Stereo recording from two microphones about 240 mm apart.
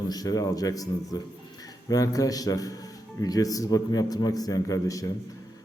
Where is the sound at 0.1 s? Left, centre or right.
Centre.